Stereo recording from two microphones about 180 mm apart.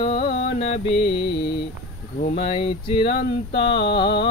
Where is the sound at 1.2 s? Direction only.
70° left (ahead or behind).